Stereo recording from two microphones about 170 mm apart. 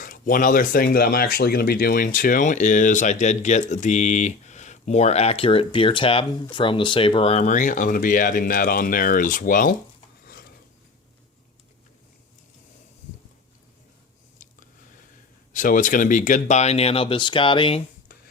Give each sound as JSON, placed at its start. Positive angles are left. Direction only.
{"t": 0.0, "sound": "speech", "side_deg": 55}
{"t": 14.4, "sound": "chewing", "side_deg": 50}
{"t": 15.5, "sound": "speech", "side_deg": 50}